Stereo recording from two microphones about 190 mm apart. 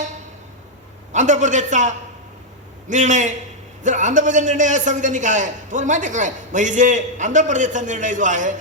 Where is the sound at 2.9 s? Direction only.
40° right (ahead or behind).